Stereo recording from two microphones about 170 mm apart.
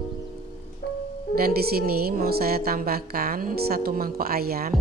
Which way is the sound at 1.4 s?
60° right (ahead or behind).